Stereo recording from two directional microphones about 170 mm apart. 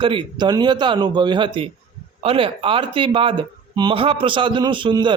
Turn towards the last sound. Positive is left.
turn(degrees=-25)  # may be behind; listen again after turning